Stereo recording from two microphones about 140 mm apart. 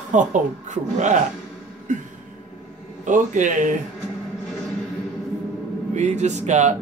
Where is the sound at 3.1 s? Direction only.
65° right (ahead or behind).